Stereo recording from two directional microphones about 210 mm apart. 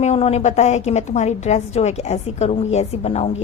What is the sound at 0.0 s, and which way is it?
A woman's voice, 30° left (ahead or behind).